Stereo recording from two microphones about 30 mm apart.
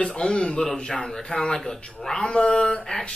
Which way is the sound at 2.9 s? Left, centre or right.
Left.